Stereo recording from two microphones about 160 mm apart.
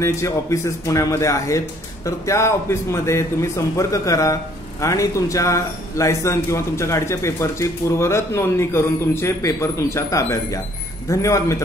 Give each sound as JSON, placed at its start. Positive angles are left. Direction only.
{"t": 0.0, "sound": "a man's voice", "side_deg": 20}